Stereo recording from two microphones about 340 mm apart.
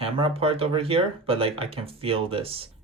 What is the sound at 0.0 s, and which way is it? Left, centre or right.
Speech, centre.